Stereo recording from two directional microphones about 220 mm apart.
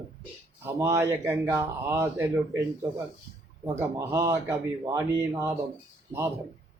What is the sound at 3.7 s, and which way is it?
A man's voice, 15° right (ahead or behind).